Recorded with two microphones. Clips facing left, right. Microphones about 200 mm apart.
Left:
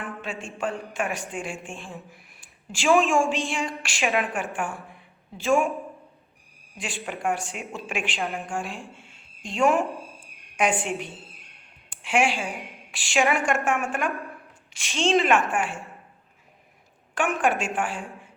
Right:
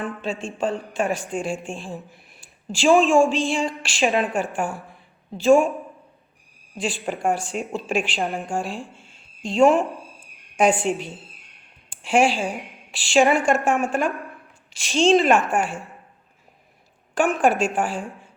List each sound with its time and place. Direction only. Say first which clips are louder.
0.0 s a sound: right 6 dB; 25° right (ahead or behind)
0.9 s a woman's voice: right 5 dB; 30° right (ahead or behind)
6.7 s a woman's voice: right 7 dB; 30° right (ahead or behind)
17.2 s a woman's voice: right 5 dB; 35° right (ahead or behind)